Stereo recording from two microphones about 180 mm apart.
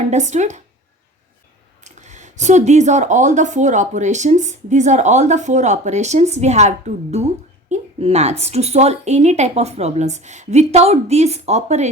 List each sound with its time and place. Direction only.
0.0 s speech: 40° right (ahead or behind)
1.8 s speech: 40° right (ahead or behind)